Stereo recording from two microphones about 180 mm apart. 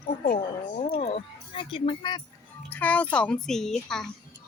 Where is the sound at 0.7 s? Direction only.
40° left (ahead or behind).